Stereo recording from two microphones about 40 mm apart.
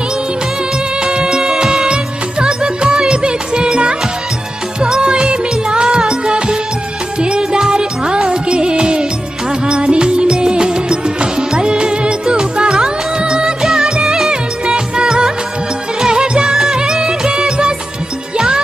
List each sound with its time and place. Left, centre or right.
1.0 s music: right
14.7 s music of bollywood: right